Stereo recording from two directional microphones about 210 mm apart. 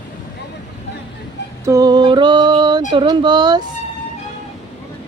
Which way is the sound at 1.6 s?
15° right (ahead or behind).